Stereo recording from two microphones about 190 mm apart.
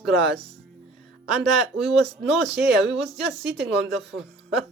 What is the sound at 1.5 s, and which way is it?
Speech, centre (ahead or behind).